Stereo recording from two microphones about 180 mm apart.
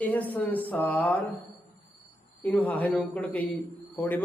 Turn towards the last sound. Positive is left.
turn(degrees=10)  # may be behind; listen again after turning